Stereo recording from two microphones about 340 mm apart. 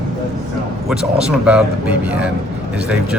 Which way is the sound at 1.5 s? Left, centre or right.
Centre.